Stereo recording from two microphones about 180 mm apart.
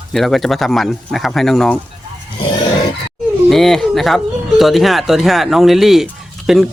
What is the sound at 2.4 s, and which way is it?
Roar, 25° left (ahead or behind).